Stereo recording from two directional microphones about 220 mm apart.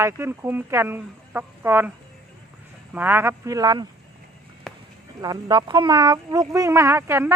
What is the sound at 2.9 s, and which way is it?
Speech, 10° right (ahead or behind).